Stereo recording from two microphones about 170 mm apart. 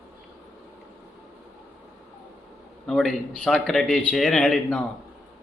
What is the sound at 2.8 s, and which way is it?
A man's voice, 5° left (ahead or behind).